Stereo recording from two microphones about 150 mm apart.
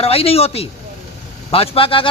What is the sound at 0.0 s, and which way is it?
Speech, 40° left (ahead or behind).